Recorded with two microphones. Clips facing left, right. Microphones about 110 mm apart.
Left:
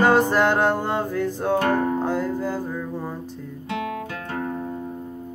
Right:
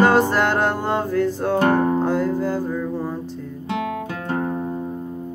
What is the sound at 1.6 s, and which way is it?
Music, 30° right (ahead or behind).